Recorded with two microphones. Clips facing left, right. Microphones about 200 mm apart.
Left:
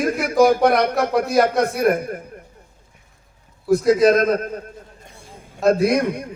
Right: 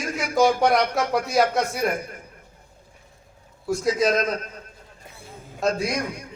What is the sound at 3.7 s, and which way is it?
Speech, centre (ahead or behind).